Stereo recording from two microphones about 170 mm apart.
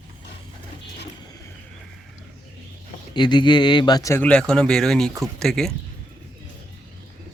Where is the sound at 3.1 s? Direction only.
25° left (ahead or behind); by 5.7 s 5° left (ahead or behind).